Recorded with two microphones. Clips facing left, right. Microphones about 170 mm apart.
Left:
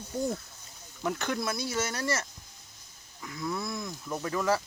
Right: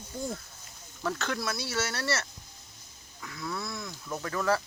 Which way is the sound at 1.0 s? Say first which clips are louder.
Left 1 dB; 15° left (ahead or behind).